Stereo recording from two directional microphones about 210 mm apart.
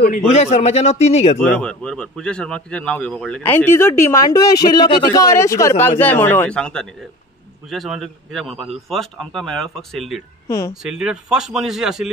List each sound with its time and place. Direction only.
0.3 s a man's voice: 30° left (ahead or behind)
1.4 s speech: 5° left (ahead or behind)